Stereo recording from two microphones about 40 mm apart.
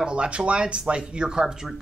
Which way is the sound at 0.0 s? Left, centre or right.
Right.